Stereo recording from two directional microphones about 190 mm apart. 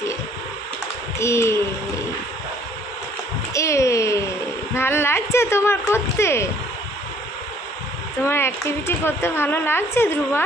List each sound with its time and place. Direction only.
1.2 s a woman's voice: 15° left (ahead or behind)
3.5 s a sound: 15° left (ahead or behind)
8.3 s a woman's voice: 15° left (ahead or behind)